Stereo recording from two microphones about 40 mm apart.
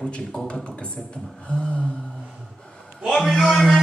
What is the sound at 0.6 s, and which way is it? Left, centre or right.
Speech, left.